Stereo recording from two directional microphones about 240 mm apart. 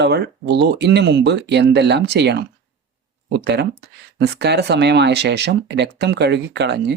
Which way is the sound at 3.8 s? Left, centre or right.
Right.